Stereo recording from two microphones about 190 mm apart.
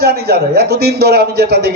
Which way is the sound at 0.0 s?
55° right (ahead or behind).